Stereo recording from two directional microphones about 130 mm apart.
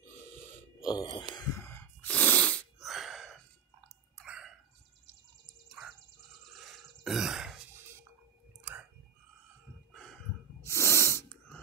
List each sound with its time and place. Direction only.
0.8 s speech: 35° left (ahead or behind)
1.5 s sneeze: 20° left (ahead or behind)
2.9 s gasp: centre (ahead or behind)
5.8 s music: centre (ahead or behind)
7.0 s throat clearing: centre (ahead or behind)
10.6 s snort: 20° left (ahead or behind)